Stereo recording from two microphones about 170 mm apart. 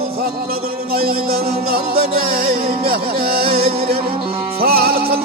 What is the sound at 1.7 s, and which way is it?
Music, 60° right (ahead or behind).